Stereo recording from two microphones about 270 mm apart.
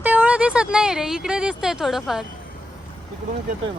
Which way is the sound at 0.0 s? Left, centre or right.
Centre.